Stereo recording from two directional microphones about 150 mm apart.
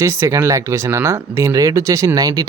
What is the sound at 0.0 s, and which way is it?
Speech, 20° right (ahead or behind).